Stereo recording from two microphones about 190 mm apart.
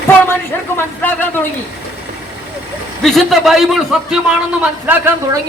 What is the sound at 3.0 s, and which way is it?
A man's voice, centre (ahead or behind).